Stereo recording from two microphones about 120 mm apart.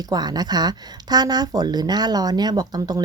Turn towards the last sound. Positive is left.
turn(degrees=-35)  # may be behind; listen again after turning